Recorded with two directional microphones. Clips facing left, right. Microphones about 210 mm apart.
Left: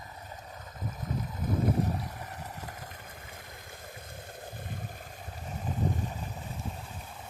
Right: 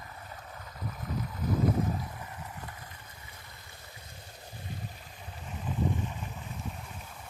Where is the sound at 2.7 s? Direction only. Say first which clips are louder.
Left 4 dB; 45° left (ahead or behind).